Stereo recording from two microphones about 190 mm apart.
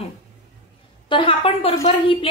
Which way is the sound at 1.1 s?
30° left (ahead or behind).